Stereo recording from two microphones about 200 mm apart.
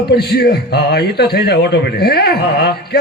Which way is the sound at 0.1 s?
50° left (ahead or behind).